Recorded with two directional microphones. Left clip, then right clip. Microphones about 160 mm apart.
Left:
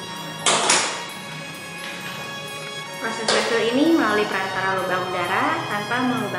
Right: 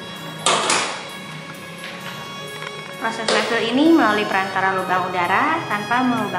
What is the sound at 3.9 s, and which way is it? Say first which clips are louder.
Speech: right 3 dB; 20° right (ahead or behind).